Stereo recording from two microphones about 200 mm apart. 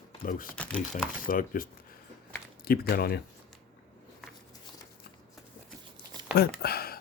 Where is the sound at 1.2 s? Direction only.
45° left (ahead or behind).